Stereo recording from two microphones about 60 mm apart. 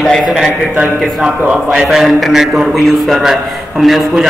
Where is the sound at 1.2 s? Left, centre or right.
Centre.